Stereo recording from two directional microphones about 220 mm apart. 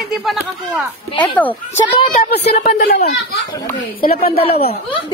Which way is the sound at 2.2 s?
50° left (ahead or behind).